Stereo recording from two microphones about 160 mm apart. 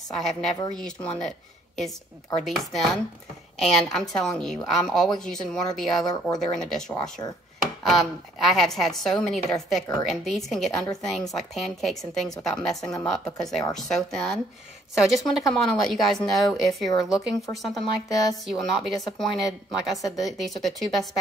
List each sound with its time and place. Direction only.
0.1 s speech: 5° left (ahead or behind)
2.4 s speech: centre (ahead or behind)
6.9 s speech: 25° left (ahead or behind)
7.9 s speech: centre (ahead or behind)